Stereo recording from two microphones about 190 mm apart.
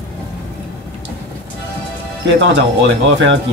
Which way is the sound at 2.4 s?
70° right (ahead or behind).